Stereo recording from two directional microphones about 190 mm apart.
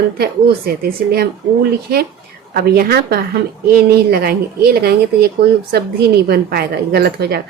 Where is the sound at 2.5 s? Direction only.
55° right (ahead or behind).